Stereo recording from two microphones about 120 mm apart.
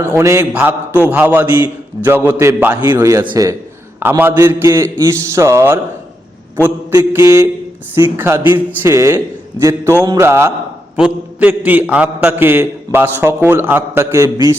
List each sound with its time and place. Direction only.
0.0 s a man's voice: 20° right (ahead or behind)
10.9 s a man's voice: 10° right (ahead or behind); by 14.5 s 25° right (ahead or behind)